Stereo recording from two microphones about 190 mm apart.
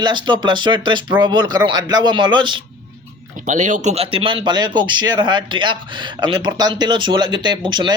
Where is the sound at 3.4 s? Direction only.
40° right (ahead or behind).